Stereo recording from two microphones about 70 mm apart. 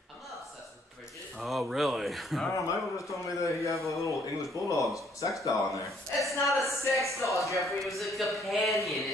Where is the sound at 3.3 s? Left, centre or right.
Left.